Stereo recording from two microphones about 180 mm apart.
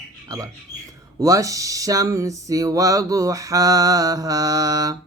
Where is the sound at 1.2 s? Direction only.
20° right (ahead or behind).